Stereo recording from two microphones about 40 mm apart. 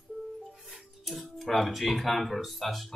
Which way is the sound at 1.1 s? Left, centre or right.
Centre.